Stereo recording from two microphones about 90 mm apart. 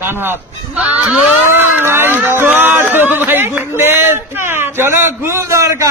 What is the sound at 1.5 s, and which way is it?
Speech, 25° right (ahead or behind).